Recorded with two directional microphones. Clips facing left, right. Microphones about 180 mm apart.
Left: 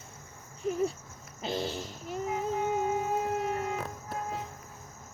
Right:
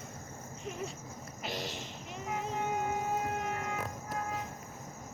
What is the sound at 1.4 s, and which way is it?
Child singing, 30° left (ahead or behind).